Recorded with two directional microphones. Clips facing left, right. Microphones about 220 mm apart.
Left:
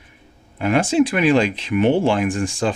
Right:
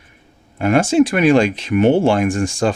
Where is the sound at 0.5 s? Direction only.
45° right (ahead or behind).